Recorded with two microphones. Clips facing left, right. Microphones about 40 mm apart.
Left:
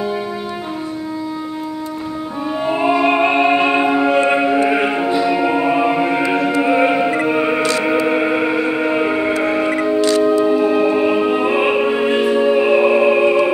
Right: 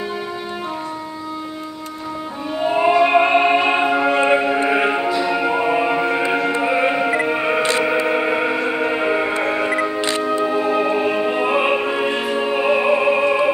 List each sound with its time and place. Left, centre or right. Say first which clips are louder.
2.6 s music: right 1 dB; centre
9.9 s music: left 7 dB; right
10.4 s music: left 4 dB; centre